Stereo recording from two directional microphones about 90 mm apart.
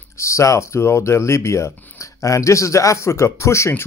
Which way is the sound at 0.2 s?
35° left (ahead or behind).